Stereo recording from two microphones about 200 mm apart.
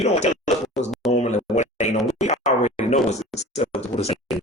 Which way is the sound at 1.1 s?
35° left (ahead or behind).